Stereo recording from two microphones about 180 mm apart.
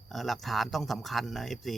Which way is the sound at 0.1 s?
Centre (ahead or behind).